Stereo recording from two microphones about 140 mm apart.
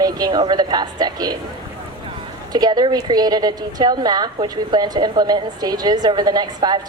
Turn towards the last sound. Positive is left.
turn(degrees=-30)  # may be behind; listen again after turning